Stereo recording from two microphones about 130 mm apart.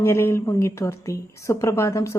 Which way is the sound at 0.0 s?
20° left (ahead or behind).